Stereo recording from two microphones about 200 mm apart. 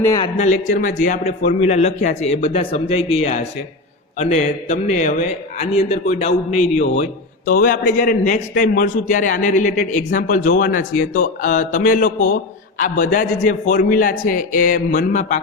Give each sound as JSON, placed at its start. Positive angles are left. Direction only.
{"t": 0.0, "sound": "speech", "side_deg": 15}
{"t": 0.3, "sound": "a man's voice", "side_deg": 40}